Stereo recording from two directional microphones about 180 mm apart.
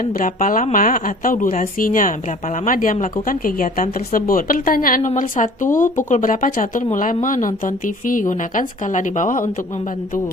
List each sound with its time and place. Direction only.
0.0 s a woman's voice: 50° left (ahead or behind)